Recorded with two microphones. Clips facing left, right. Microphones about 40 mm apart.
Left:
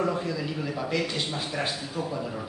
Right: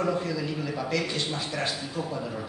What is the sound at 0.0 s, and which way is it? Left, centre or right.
A man's voice, centre.